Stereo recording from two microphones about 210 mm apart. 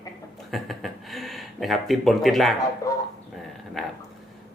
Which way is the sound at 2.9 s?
15° left (ahead or behind).